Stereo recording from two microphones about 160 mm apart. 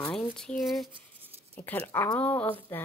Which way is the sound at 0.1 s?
5° left (ahead or behind).